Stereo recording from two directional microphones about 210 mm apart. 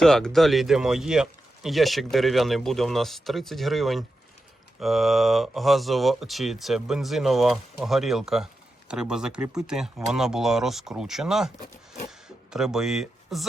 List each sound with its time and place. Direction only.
0.0 s speech: centre (ahead or behind)